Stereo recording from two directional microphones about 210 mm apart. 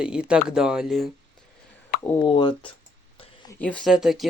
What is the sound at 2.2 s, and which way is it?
Speech, 20° left (ahead or behind).